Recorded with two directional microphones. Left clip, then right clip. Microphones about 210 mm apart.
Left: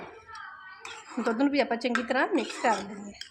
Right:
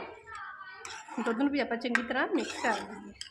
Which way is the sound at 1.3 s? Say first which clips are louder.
Left 4 dB; 35° left (ahead or behind).